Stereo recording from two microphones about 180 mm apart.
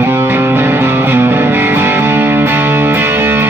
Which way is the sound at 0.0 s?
10° right (ahead or behind).